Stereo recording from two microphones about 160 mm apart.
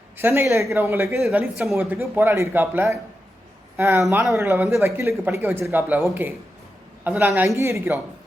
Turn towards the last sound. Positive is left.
turn(degrees=-15)  # may be behind; listen again after turning